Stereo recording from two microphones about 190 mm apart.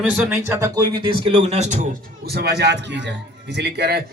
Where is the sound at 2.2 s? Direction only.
55° right (ahead or behind).